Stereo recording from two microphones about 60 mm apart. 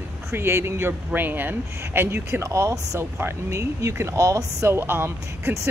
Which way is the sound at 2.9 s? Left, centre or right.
Right.